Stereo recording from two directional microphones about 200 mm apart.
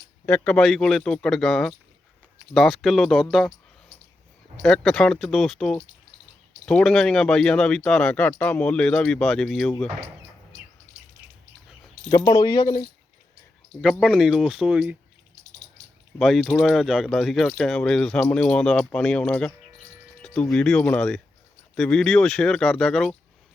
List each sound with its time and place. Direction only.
0.3 s speech: 5° left (ahead or behind)
4.6 s speech: 5° left (ahead or behind)
12.1 s speech: 20° left (ahead or behind)
13.8 s speech: centre (ahead or behind)
16.1 s speech: centre (ahead or behind)